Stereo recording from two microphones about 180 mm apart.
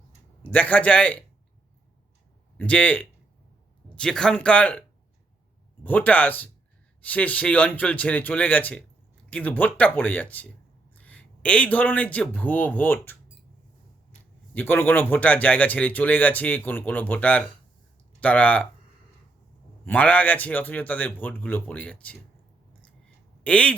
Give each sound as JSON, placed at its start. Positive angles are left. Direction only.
{"t": 0.4, "sound": "speech", "side_deg": 10}
{"t": 2.6, "sound": "speech", "side_deg": 5}
{"t": 5.8, "sound": "a man's voice", "side_deg": 10}
{"t": 14.5, "sound": "speech", "side_deg": 10}
{"t": 19.8, "sound": "speech", "side_deg": 10}
{"t": 23.4, "sound": "speech", "side_deg": 5}